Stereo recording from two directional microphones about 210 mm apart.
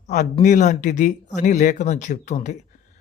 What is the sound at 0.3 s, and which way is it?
A man's voice, 35° left (ahead or behind).